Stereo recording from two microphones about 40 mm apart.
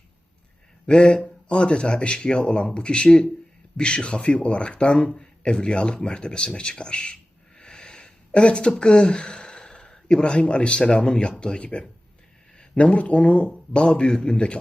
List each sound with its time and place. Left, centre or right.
0.9 s speech: left
7.6 s a sound: left
8.8 s speech: left
14.1 s speech: centre